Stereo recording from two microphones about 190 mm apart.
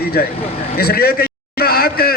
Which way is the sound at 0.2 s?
55° left (ahead or behind).